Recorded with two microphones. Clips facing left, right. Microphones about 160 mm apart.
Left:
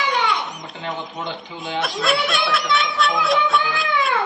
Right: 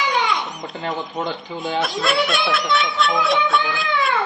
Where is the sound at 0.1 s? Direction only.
Centre (ahead or behind).